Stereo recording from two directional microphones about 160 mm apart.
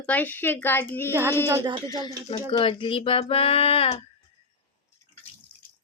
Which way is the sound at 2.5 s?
35° left (ahead or behind).